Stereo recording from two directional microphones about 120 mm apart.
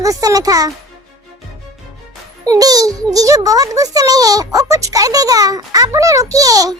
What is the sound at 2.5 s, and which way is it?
A child's voice, 30° right (ahead or behind).